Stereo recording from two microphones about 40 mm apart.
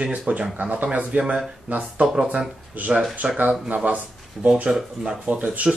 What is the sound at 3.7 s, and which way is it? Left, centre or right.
Speech, right.